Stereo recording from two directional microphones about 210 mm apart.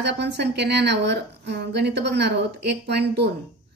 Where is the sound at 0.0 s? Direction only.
55° right (ahead or behind).